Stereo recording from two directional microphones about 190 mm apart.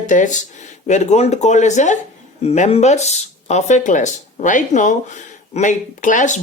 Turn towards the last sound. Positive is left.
turn(degrees=40)  # may be behind; listen again after turning